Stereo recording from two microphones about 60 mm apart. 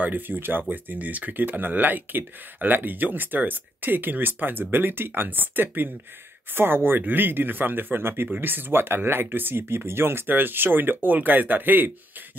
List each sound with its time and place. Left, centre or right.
0.0 s speech: right